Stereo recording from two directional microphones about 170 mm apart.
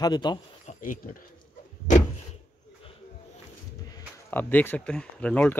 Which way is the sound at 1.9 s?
45° left (ahead or behind).